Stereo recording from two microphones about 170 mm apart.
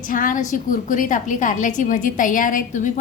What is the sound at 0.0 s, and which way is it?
A woman's voice, 50° left (ahead or behind).